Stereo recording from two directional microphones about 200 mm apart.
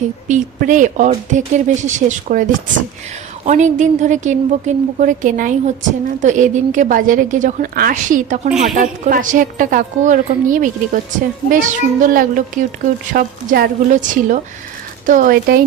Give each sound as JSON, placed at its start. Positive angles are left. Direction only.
{"t": 0.3, "sound": "a woman's voice", "side_deg": -40}
{"t": 3.4, "sound": "a woman's voice", "side_deg": -35}
{"t": 8.4, "sound": "speech", "side_deg": -5}
{"t": 8.8, "sound": "a woman's voice", "side_deg": -40}